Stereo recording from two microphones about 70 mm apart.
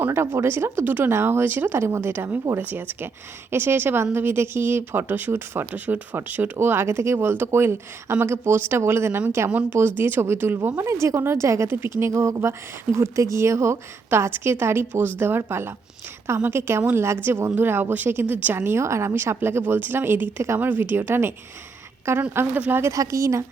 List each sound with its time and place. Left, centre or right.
0.0 s speech: right
1.8 s speech: right
9.5 s speech: right
10.0 s a woman's voice: right
22.5 s speech: right
22.9 s a woman's voice: right